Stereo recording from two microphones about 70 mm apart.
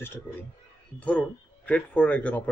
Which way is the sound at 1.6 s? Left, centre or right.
Left.